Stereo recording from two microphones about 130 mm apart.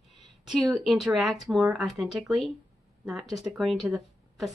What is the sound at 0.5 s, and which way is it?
A woman's voice, centre (ahead or behind).